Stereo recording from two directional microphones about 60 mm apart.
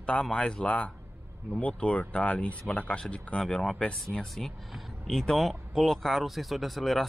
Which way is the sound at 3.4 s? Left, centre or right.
Centre.